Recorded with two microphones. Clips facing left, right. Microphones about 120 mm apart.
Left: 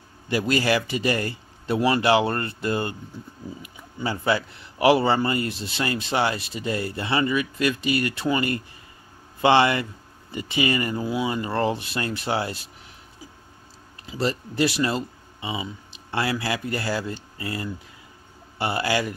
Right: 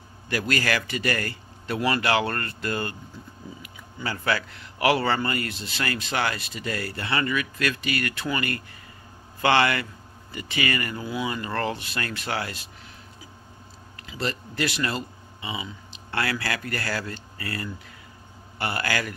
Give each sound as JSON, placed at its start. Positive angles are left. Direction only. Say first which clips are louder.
{"t": 0.3, "sound": "a man's voice", "louder": "left 4 dB", "side_deg": 20}
{"t": 13.9, "sound": "a sound", "louder": "left 5 dB", "side_deg": 30}
{"t": 14.2, "sound": "speech", "louder": "left 5 dB", "side_deg": 20}